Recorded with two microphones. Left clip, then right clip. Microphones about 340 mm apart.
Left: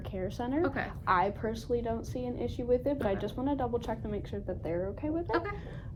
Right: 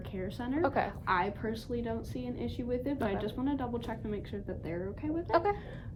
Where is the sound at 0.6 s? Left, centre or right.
Centre.